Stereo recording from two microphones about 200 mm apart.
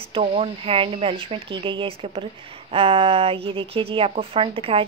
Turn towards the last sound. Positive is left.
turn(degrees=-25)  # may be behind; listen again after turning